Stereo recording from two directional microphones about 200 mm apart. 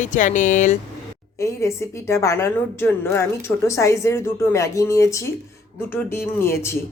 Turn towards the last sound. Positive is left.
turn(degrees=15)  # may be behind; listen again after turning